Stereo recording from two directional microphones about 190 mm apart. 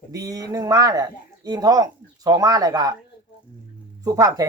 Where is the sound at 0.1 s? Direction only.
20° right (ahead or behind).